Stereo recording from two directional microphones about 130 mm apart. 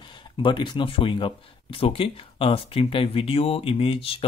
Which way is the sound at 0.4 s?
40° left (ahead or behind).